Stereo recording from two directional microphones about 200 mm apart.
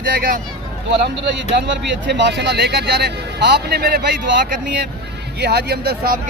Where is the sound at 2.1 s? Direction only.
60° right (ahead or behind).